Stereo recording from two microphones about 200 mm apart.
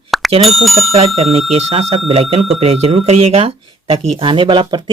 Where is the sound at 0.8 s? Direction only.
30° right (ahead or behind).